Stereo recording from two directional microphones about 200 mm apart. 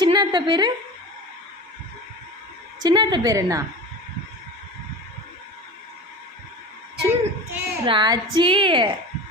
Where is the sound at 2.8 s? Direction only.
20° right (ahead or behind).